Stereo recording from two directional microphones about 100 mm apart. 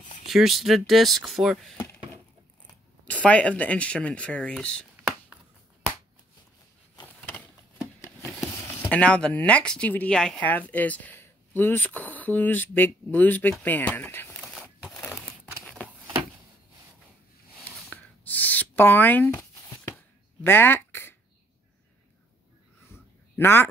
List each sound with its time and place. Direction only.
0.3 s speech: centre (ahead or behind)
3.1 s speech: 15° left (ahead or behind)
7.8 s a sound: 30° left (ahead or behind)
8.9 s speech: 10° left (ahead or behind)
17.6 s a sound: 15° left (ahead or behind)
23.3 s speech: 25° left (ahead or behind)